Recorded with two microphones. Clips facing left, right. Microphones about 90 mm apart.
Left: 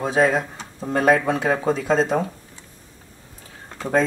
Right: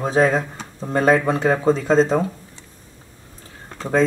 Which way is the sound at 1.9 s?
5° left (ahead or behind).